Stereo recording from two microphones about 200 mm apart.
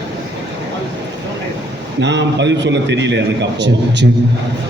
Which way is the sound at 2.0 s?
60° right (ahead or behind).